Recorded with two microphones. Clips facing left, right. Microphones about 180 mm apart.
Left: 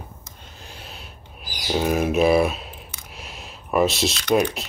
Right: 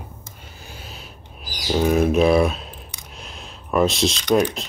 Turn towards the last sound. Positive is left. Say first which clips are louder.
# right 1 dB
turn(degrees=5)  # may be behind; listen again after turning